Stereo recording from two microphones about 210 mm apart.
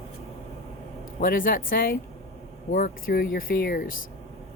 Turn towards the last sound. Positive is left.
turn(degrees=40)  # may be behind; listen again after turning